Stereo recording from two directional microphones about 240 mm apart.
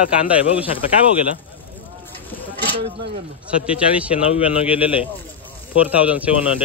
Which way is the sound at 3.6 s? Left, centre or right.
Centre.